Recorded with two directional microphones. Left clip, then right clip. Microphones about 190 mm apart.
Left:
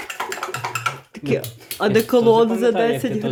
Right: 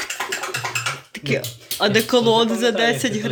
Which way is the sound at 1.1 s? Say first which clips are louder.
Even; 20° left (ahead or behind).